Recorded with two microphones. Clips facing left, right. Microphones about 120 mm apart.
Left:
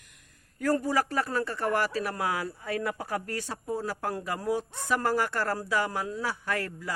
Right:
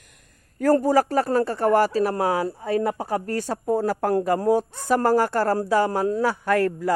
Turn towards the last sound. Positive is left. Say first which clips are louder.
# right 11 dB
turn(degrees=-50)  # may be behind; listen again after turning